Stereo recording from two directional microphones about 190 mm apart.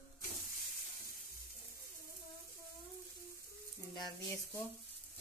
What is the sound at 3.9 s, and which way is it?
Sizzle, 15° left (ahead or behind).